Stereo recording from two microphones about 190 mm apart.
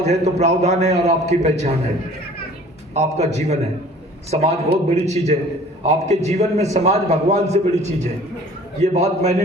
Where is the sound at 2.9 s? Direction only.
35° right (ahead or behind).